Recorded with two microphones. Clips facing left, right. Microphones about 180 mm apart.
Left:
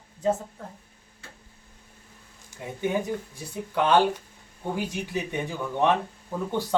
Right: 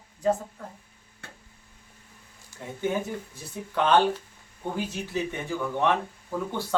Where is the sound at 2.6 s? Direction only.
10° left (ahead or behind).